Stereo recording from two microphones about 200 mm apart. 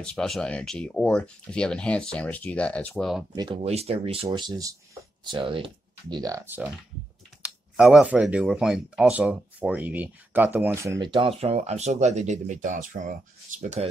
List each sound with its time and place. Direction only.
0.0 s speech: 5° left (ahead or behind)
3.3 s speech: 25° right (ahead or behind)